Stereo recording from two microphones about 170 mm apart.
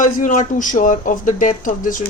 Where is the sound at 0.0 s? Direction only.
50° left (ahead or behind).